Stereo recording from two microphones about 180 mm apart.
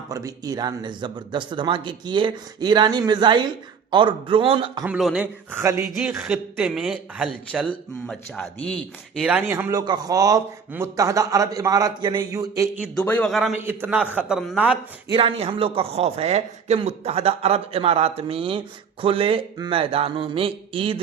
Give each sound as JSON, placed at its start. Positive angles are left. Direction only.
{"t": 0.1, "sound": "a man's voice", "side_deg": -20}
{"t": 4.9, "sound": "a man's voice", "side_deg": -5}
{"t": 9.2, "sound": "a man's voice", "side_deg": -10}
{"t": 13.1, "sound": "speech", "side_deg": 5}
{"t": 13.7, "sound": "a man's voice", "side_deg": -10}
{"t": 15.1, "sound": "a man's voice", "side_deg": -30}